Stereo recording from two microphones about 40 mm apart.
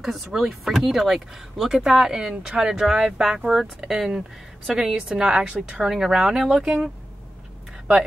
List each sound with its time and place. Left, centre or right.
0.0 s a woman's voice: centre